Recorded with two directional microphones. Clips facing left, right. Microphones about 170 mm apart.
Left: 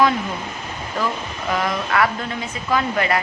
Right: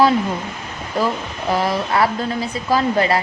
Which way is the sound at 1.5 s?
30° right (ahead or behind).